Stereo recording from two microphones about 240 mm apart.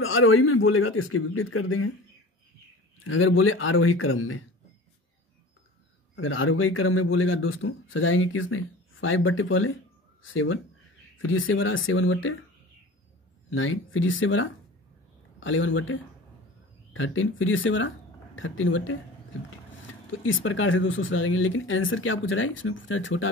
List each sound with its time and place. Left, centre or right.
0.0 s speech: left
3.0 s speech: left
6.1 s speech: left
13.5 s speech: left
20.2 s speech: left